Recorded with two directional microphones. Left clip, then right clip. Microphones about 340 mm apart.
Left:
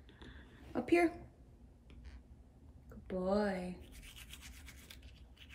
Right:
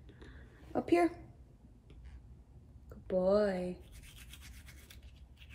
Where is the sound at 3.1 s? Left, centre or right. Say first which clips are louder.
Right 6 dB; centre.